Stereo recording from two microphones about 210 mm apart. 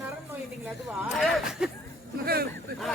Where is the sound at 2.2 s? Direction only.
45° right (ahead or behind).